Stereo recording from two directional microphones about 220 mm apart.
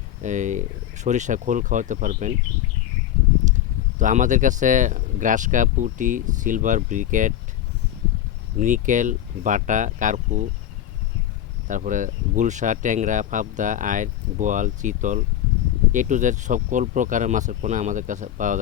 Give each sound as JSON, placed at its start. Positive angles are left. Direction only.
{"t": 0.2, "sound": "speech", "side_deg": -35}
{"t": 3.9, "sound": "speech", "side_deg": -35}
{"t": 8.5, "sound": "speech", "side_deg": -35}
{"t": 11.7, "sound": "speech", "side_deg": -35}